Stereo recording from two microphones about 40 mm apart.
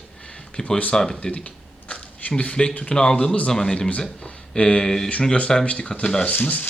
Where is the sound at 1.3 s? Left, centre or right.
Left.